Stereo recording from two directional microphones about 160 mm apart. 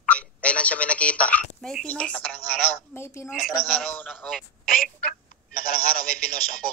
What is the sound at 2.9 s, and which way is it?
Speech, 15° left (ahead or behind).